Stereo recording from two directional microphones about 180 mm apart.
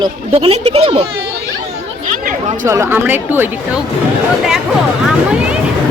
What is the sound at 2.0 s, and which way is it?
Chatter, 45° right (ahead or behind).